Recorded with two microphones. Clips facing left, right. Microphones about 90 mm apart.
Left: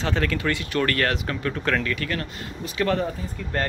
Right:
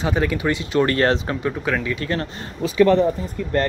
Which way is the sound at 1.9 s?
30° right (ahead or behind).